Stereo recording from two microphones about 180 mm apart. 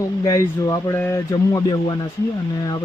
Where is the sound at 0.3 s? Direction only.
15° left (ahead or behind).